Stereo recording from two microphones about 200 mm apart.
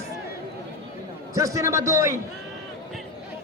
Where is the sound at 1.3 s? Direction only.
15° right (ahead or behind).